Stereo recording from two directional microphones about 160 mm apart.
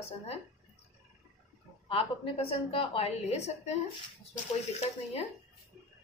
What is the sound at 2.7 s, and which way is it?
A woman's voice, 35° left (ahead or behind).